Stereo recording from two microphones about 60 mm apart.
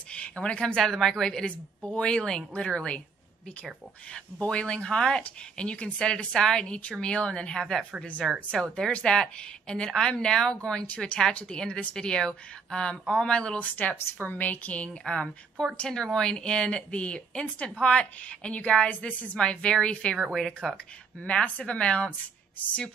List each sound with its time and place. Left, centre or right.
0.1 s speech: centre
4.1 s speech: centre
14.2 s a woman's voice: left
20.3 s speech: centre
21.2 s a woman's voice: centre